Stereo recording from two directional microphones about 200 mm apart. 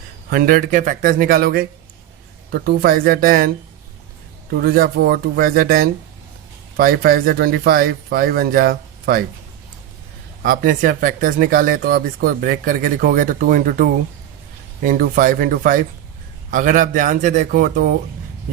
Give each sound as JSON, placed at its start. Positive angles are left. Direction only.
{"t": 0.3, "sound": "speech", "side_deg": -45}
{"t": 4.5, "sound": "speech", "side_deg": -50}
{"t": 10.4, "sound": "a man's voice", "side_deg": -45}